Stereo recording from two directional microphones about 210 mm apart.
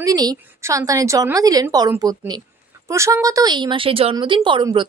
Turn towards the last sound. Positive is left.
turn(degrees=-20)  # may be behind; listen again after turning